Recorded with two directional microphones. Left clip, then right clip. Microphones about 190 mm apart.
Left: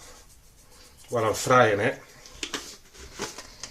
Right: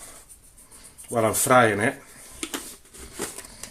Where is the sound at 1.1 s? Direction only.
45° right (ahead or behind).